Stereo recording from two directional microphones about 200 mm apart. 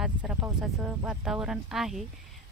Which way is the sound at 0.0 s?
5° right (ahead or behind).